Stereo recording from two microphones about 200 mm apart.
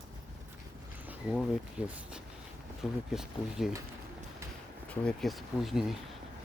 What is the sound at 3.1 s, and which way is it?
Speech, centre (ahead or behind).